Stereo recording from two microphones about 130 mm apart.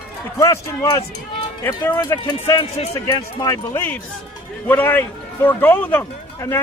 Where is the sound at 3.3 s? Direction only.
30° left (ahead or behind).